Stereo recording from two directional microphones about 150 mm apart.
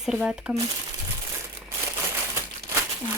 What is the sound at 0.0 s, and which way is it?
Speech, 5° right (ahead or behind).